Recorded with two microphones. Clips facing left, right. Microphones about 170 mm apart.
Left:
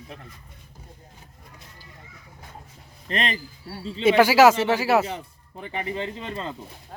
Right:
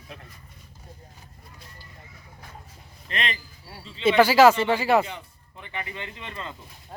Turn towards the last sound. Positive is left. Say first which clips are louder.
# left 6 dB
turn(degrees=35)  # may be behind; listen again after turning